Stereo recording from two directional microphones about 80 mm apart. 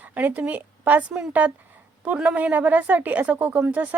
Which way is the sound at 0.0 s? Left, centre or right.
Right.